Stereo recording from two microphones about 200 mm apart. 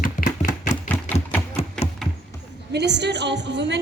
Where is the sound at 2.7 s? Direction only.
60° right (ahead or behind).